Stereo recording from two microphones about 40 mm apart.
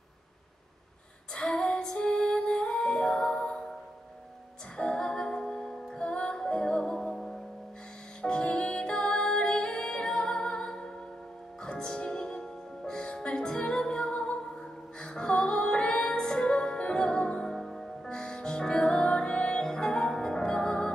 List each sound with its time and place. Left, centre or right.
1.6 s music: left
4.7 s music: left
7.0 s music: centre
8.2 s music: left
14.4 s music: centre
17.5 s music: centre
18.0 s music: left